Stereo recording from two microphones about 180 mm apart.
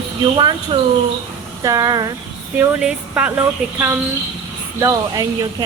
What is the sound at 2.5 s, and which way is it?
Speech, 5° right (ahead or behind).